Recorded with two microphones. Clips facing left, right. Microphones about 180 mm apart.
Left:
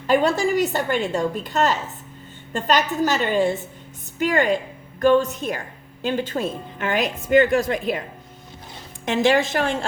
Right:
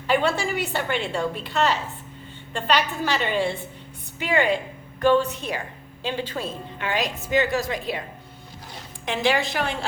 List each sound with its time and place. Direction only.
0.1 s a woman's voice: 40° left (ahead or behind)
9.0 s a woman's voice: 45° left (ahead or behind)